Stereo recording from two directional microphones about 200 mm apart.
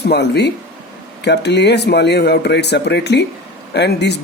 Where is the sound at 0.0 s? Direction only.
55° left (ahead or behind).